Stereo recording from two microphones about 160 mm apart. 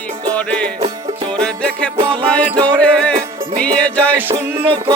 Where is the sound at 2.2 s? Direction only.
10° left (ahead or behind).